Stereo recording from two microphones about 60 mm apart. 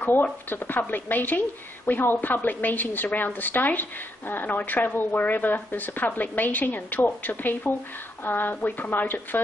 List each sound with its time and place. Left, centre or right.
0.0 s speech: left